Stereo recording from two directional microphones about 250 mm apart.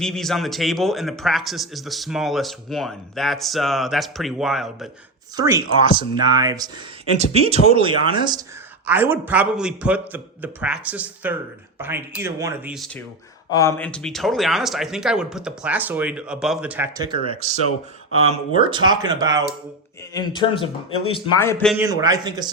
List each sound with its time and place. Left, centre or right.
0.0 s speech: centre
5.4 s a man's voice: centre
12.7 s a man's voice: centre
20.1 s a man's voice: centre
21.4 s speech: centre
21.8 s a man's voice: centre